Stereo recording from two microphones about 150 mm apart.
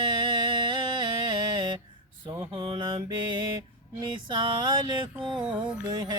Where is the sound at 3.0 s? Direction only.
30° right (ahead or behind).